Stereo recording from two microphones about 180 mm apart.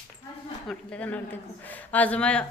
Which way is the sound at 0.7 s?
5° left (ahead or behind).